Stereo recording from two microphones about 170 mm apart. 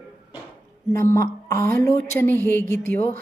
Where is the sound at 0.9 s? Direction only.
15° left (ahead or behind).